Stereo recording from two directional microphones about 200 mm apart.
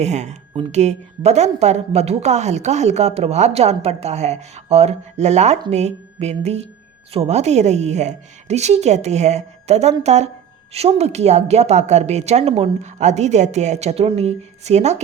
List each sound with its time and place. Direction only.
0.0 s speech: 35° right (ahead or behind)